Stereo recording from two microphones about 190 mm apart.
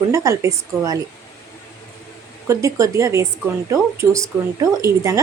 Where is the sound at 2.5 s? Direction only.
15° right (ahead or behind).